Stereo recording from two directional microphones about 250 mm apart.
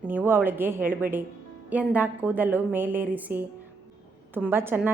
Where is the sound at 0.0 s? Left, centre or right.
Centre.